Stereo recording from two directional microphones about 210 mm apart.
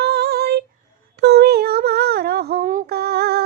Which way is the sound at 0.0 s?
50° right (ahead or behind).